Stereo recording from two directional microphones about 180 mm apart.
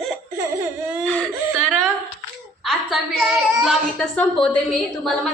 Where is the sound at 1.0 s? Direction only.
5° left (ahead or behind).